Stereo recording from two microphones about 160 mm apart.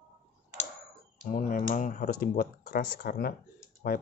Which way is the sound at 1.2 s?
60° left (ahead or behind).